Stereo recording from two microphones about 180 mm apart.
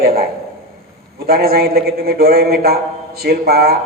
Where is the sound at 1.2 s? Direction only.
55° right (ahead or behind).